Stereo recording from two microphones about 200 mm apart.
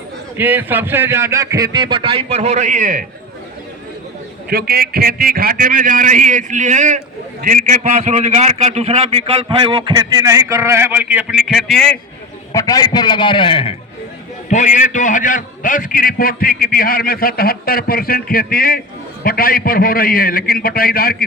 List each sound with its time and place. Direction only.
0.3 s a man's voice: 10° right (ahead or behind); by 3.0 s 40° right (ahead or behind)
4.4 s a man's voice: 50° right (ahead or behind); by 11.9 s centre (ahead or behind)
12.5 s a man's voice: 20° left (ahead or behind)
14.5 s a man's voice: 35° left (ahead or behind)